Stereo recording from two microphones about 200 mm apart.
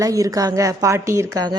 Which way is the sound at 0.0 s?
15° right (ahead or behind).